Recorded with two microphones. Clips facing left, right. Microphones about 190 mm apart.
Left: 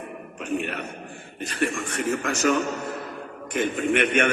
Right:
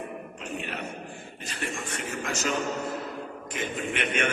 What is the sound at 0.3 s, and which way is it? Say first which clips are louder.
A man's voice: left 9 dB; 55° left (ahead or behind).